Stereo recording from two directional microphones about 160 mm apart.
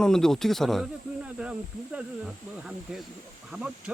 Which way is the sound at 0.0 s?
5° left (ahead or behind).